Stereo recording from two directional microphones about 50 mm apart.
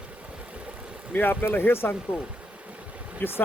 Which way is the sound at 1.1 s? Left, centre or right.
Left.